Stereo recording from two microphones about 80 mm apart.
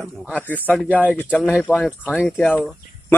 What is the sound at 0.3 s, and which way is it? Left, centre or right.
Speech, left.